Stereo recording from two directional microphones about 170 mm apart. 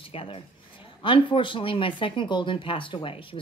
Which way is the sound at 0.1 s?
35° left (ahead or behind).